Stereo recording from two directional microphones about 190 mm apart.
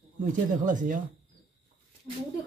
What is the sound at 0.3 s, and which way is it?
Speech, 45° right (ahead or behind).